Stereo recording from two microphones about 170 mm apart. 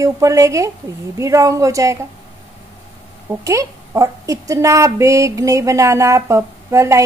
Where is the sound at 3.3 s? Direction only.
20° right (ahead or behind).